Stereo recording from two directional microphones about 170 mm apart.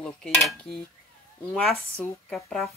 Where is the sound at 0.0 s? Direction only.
Centre (ahead or behind).